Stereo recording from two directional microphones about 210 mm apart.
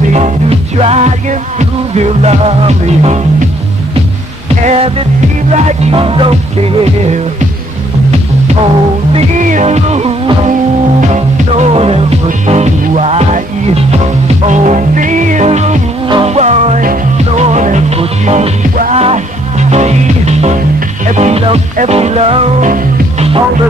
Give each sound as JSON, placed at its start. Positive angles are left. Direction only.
{"t": 0.1, "sound": "music", "side_deg": -30}
{"t": 4.6, "sound": "music", "side_deg": -25}
{"t": 9.1, "sound": "music", "side_deg": -35}